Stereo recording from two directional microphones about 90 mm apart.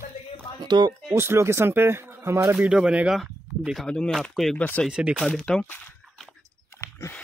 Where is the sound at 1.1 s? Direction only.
30° right (ahead or behind).